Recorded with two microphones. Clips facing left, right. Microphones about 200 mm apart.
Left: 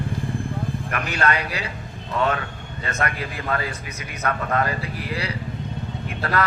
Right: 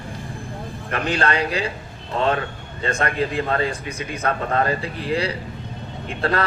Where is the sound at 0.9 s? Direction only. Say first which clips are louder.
Right 3 dB; 30° right (ahead or behind).